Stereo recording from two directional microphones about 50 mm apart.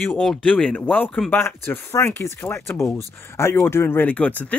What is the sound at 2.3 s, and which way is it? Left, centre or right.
Speech, left.